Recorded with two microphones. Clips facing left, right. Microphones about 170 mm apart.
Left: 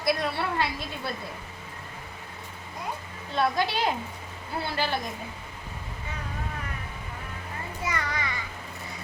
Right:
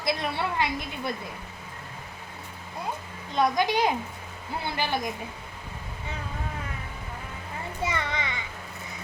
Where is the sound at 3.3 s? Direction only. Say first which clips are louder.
Right 2 dB; 15° right (ahead or behind).